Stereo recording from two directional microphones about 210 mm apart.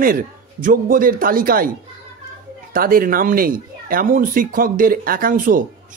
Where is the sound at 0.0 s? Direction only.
40° right (ahead or behind).